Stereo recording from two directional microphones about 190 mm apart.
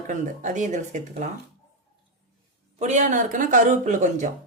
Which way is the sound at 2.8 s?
40° right (ahead or behind).